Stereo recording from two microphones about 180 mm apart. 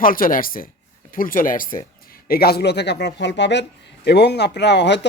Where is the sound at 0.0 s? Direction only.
50° left (ahead or behind).